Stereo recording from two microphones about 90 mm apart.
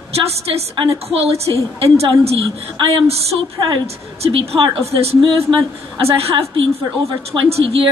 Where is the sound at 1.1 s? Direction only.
90° right.